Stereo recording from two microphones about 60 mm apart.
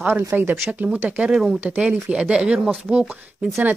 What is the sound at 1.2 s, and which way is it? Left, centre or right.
A woman's voice, centre.